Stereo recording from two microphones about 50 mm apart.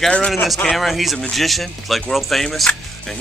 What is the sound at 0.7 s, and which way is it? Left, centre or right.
Speech, centre.